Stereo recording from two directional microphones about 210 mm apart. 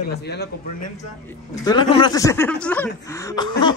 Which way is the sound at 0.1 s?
50° left (ahead or behind).